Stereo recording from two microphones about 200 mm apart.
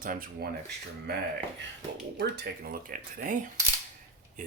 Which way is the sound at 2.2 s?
50° right (ahead or behind).